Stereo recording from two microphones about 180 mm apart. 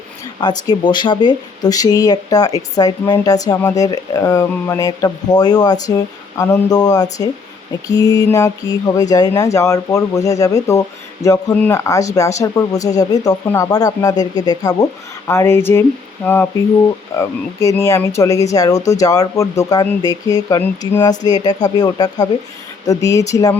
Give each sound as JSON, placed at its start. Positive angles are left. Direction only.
{"t": 0.3, "sound": "speech", "side_deg": 25}